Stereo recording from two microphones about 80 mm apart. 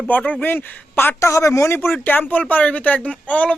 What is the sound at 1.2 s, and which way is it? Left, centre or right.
Speech, left.